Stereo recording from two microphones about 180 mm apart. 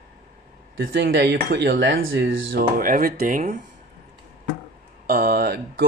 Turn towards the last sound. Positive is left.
turn(degrees=-60)  # may be behind; listen again after turning